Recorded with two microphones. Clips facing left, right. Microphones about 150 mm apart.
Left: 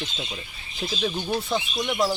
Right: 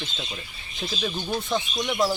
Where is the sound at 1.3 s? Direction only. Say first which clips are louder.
Even; 5° left (ahead or behind).